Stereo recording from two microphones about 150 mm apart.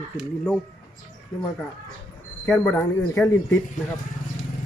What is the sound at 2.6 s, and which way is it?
Speech, 10° left (ahead or behind).